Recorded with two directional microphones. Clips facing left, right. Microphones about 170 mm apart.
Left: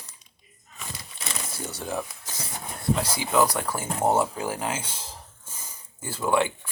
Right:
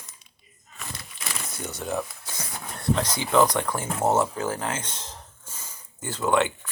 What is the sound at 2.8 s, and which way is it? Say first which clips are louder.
Speech: right 1 dB; 10° left (ahead or behind).